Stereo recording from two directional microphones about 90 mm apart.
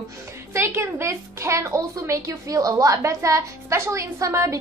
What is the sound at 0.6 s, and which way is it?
A woman's voice, 30° right (ahead or behind).